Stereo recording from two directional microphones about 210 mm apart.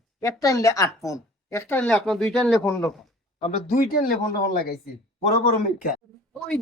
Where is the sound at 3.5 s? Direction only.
45° left (ahead or behind).